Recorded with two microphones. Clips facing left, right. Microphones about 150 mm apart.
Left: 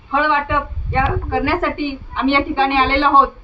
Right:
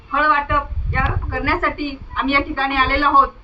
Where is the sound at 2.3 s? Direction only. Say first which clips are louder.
Left 5 dB; 25° left (ahead or behind).